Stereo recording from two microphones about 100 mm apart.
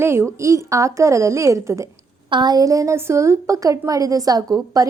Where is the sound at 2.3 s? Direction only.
45° right (ahead or behind).